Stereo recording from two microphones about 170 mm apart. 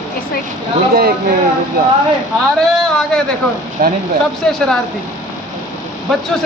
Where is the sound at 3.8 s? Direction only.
55° right (ahead or behind).